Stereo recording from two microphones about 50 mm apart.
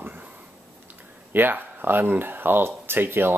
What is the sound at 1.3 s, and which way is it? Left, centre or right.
Speech, right.